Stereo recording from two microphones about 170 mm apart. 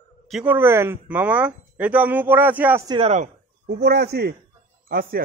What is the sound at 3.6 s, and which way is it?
Speech, 75° right (ahead or behind).